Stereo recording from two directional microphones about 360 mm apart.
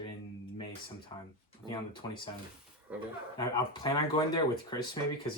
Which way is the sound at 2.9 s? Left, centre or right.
Centre.